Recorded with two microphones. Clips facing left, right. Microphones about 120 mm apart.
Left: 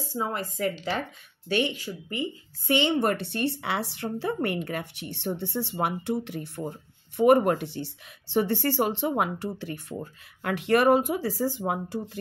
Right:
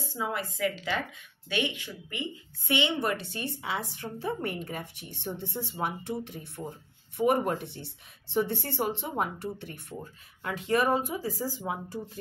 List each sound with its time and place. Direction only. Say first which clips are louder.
0.1 s speech: left 2 dB; 40° left (ahead or behind); by 9.9 s 90° left
10.4 s speech: left 5 dB; 70° left (ahead or behind)